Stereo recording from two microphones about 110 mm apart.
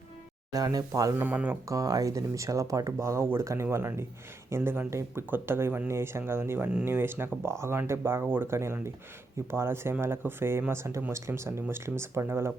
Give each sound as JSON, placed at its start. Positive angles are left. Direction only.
{"t": 0.5, "sound": "speech", "side_deg": -35}
{"t": 1.1, "sound": "speech", "side_deg": -15}
{"t": 1.6, "sound": "speech", "side_deg": -30}